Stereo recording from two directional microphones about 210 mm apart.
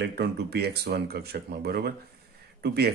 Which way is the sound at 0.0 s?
50° right (ahead or behind).